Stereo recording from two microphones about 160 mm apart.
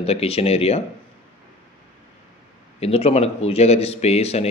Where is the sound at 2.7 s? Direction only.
40° left (ahead or behind).